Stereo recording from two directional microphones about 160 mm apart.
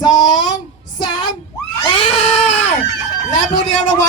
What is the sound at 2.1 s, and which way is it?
Cat, 45° left (ahead or behind).